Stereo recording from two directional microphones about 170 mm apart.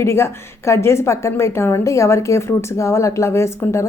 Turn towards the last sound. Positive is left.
turn(degrees=15)  # may be behind; listen again after turning